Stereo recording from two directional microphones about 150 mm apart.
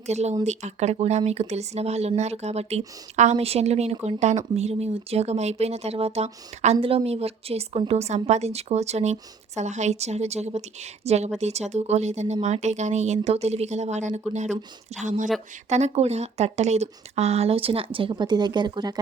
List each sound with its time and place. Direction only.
0.0 s speech: 50° right (ahead or behind); by 18.9 s 30° right (ahead or behind)